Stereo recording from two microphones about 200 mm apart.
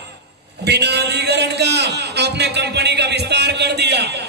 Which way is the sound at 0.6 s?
55° right (ahead or behind).